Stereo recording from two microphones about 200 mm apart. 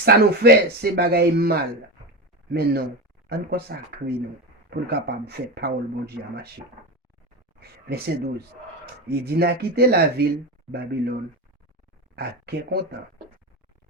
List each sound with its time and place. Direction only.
0.0 s speech: 50° right (ahead or behind)
7.6 s speech: 50° right (ahead or behind)
12.1 s speech: 55° right (ahead or behind)